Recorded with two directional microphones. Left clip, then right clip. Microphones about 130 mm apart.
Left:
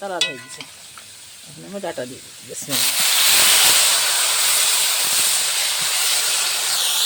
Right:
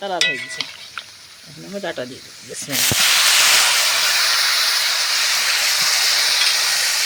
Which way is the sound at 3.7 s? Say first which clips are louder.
Right 1 dB; 25° left (ahead or behind).